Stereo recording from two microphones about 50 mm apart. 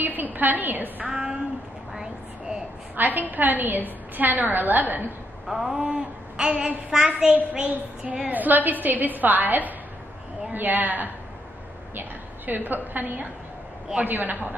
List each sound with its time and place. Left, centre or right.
0.0 s a woman's voice: right
1.0 s female singing: centre
2.0 s a sound: centre
3.2 s a woman's voice: right
5.5 s speech: centre
5.8 s speech: centre
7.3 s child singing: right
8.3 s a woman's voice: right